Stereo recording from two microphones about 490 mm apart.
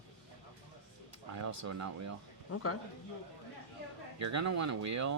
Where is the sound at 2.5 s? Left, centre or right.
Left.